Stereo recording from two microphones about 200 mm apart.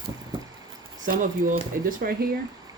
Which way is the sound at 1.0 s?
40° right (ahead or behind).